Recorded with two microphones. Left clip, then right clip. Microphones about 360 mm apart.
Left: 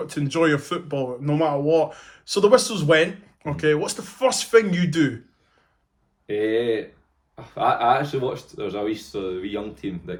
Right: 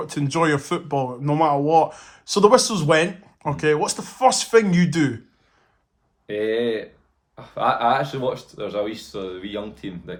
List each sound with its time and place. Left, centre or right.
0.0 s speech: centre
6.2 s speech: centre